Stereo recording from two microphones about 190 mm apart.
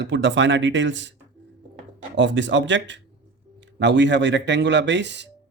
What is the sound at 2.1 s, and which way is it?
Speech, 75° right (ahead or behind).